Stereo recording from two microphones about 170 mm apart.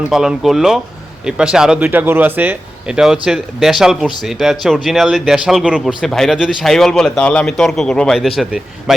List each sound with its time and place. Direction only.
0.1 s speech: 5° right (ahead or behind)